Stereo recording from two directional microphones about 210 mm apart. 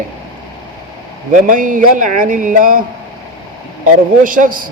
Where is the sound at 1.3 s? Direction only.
40° right (ahead or behind).